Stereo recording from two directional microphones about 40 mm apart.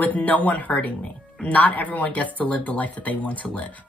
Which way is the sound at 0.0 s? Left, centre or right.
Left.